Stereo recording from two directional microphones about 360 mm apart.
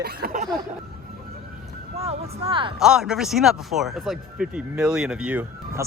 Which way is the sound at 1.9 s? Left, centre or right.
Centre.